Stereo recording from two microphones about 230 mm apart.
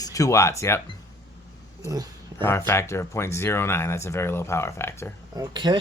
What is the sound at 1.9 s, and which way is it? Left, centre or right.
Speech, centre.